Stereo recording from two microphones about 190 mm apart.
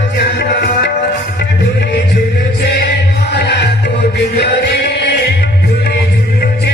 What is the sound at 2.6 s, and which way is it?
Music, 60° left (ahead or behind).